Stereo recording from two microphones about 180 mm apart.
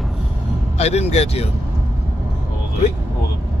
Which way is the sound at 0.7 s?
35° left (ahead or behind).